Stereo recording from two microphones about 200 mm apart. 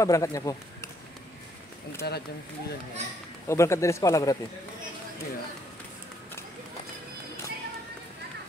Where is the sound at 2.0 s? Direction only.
55° left (ahead or behind).